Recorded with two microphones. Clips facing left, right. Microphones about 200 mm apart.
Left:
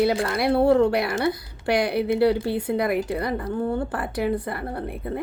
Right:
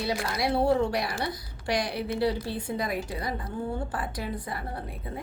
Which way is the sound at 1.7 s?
60° left (ahead or behind).